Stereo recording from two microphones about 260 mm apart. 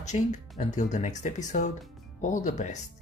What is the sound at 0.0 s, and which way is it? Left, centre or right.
Speech, left.